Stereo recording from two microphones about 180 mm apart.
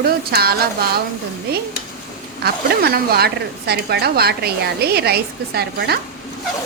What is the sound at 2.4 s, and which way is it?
A woman's voice, 60° right (ahead or behind).